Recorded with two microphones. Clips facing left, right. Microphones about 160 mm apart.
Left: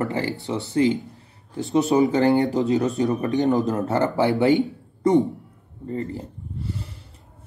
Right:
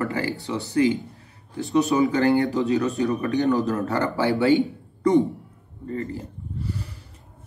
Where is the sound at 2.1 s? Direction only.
25° left (ahead or behind).